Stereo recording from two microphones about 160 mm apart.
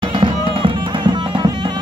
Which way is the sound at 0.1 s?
30° right (ahead or behind).